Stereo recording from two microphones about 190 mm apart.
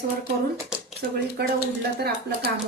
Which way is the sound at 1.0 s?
50° right (ahead or behind).